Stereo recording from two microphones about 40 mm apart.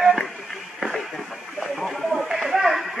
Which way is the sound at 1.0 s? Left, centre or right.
Centre.